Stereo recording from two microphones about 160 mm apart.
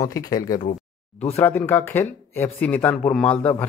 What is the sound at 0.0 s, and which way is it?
A man's voice, 20° left (ahead or behind).